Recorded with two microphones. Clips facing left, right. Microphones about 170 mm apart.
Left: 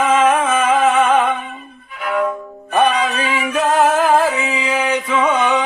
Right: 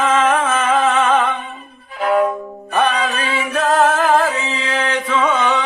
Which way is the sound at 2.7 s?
10° left (ahead or behind).